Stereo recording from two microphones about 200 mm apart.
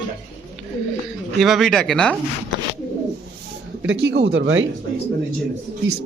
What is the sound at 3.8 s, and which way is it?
Speech, 70° right (ahead or behind).